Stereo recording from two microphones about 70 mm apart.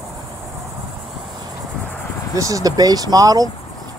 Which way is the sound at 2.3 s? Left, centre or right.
Right.